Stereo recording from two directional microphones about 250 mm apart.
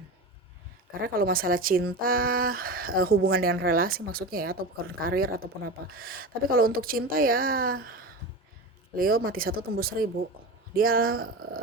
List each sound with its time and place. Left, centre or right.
0.9 s speech: right
9.0 s speech: right